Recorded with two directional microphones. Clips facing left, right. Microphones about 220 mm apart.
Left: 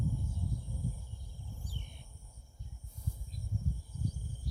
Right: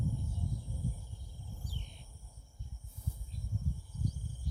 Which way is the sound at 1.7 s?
55° left (ahead or behind).